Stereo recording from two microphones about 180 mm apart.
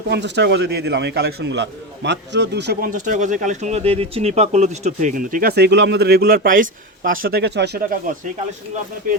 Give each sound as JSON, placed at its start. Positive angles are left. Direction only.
{"t": 0.1, "sound": "a man's voice", "side_deg": -75}
{"t": 2.9, "sound": "speech", "side_deg": -45}